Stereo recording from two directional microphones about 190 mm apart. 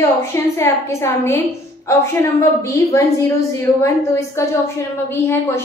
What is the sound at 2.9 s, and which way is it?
Speech, 15° left (ahead or behind).